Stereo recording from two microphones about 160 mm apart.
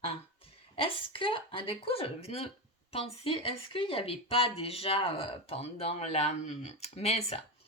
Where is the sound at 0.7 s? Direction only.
35° left (ahead or behind).